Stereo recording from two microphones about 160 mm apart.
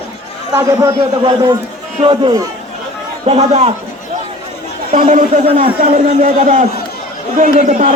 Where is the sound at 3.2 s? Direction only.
40° right (ahead or behind).